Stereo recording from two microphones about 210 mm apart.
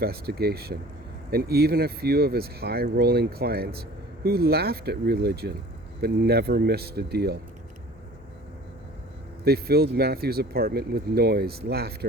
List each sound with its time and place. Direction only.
0.0 s speech: 50° right (ahead or behind)
9.4 s speech: 50° right (ahead or behind)